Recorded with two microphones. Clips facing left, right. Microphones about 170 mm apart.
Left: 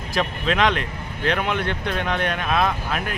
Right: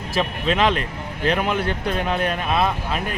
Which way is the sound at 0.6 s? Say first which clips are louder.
Even; 35° right (ahead or behind).